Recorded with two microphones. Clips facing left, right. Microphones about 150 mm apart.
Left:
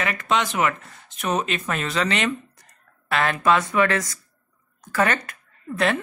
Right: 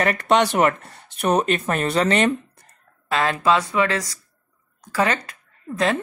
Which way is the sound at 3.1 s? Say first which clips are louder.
Right 1 dB; 25° right (ahead or behind).